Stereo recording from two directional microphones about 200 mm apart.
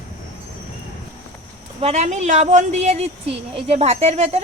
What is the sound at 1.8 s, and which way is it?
A woman's voice, 35° right (ahead or behind).